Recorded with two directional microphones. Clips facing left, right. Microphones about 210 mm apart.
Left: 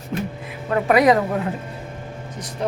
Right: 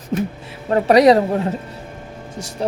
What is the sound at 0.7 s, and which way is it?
Speech, 30° right (ahead or behind).